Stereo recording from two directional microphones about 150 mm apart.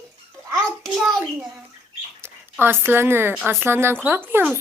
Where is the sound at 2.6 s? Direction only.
15° right (ahead or behind).